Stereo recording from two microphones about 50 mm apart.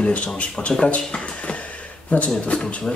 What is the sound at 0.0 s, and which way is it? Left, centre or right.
Speech, left.